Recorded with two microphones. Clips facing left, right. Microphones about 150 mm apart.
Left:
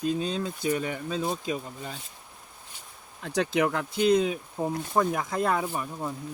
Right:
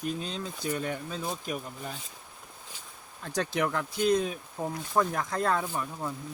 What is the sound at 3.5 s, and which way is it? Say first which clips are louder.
Speech: left 3 dB; 15° left (ahead or behind).